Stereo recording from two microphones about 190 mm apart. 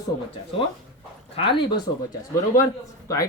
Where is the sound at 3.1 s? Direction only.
15° left (ahead or behind).